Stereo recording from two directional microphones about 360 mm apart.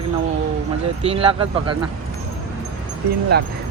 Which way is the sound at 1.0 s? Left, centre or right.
Centre.